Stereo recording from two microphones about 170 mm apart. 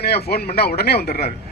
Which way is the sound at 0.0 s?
70° left (ahead or behind).